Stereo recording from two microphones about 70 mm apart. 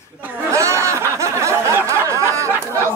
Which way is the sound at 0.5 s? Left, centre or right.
Right.